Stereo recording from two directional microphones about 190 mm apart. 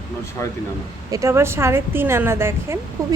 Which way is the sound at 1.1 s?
15° right (ahead or behind).